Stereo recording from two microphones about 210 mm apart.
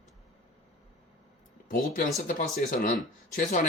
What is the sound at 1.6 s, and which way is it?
Speech, 40° left (ahead or behind).